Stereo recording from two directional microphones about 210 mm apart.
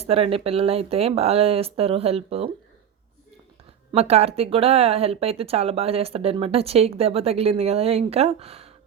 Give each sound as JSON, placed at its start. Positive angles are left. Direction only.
{"t": 0.0, "sound": "speech", "side_deg": -25}
{"t": 3.9, "sound": "speech", "side_deg": -30}